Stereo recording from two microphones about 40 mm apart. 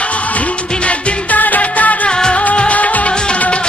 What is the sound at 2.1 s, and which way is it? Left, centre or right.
Music, left.